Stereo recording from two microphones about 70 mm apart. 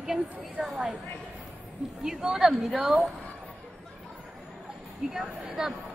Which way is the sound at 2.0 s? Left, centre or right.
Centre.